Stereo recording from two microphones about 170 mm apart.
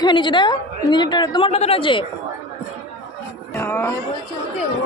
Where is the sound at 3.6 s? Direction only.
10° left (ahead or behind).